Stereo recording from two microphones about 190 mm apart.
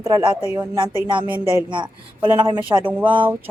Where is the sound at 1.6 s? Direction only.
25° right (ahead or behind).